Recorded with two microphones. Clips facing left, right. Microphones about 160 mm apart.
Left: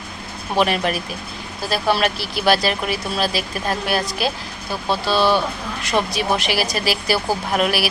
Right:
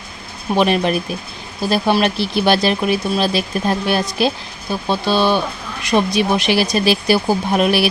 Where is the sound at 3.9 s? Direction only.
20° right (ahead or behind).